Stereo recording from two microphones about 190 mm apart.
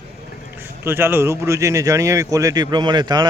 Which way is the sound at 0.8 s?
10° right (ahead or behind).